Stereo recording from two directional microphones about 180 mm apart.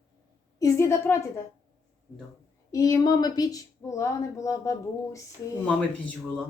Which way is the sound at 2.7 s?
20° left (ahead or behind).